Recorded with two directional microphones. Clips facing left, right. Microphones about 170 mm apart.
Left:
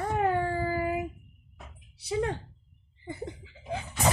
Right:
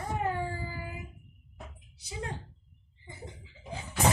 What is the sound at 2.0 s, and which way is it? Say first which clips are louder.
Speech: left 10 dB; 65° left (ahead or behind).